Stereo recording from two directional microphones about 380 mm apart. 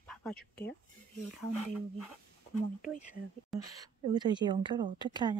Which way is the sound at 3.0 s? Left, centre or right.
Centre.